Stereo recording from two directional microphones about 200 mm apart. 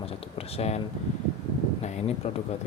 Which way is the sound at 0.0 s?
30° left (ahead or behind).